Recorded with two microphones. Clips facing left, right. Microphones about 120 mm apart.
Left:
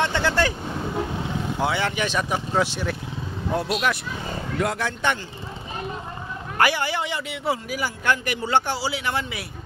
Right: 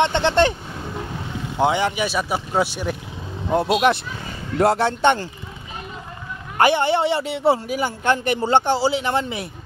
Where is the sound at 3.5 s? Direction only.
25° right (ahead or behind).